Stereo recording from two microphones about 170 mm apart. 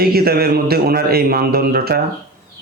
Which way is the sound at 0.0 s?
65° right (ahead or behind).